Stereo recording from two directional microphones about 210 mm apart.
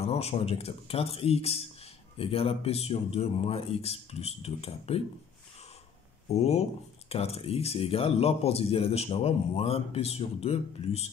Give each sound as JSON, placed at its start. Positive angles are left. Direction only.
{"t": 0.0, "sound": "speech", "side_deg": 30}
{"t": 6.2, "sound": "speech", "side_deg": 30}